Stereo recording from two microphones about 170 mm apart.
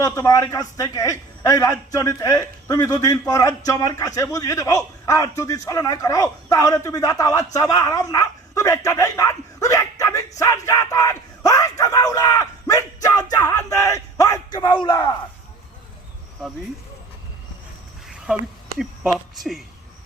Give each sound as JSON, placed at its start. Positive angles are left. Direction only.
{"t": 0.0, "sound": "a man's voice", "side_deg": 20}
{"t": 18.8, "sound": "speech", "side_deg": 0}